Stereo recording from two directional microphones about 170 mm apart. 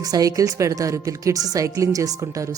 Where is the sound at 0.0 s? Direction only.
20° right (ahead or behind).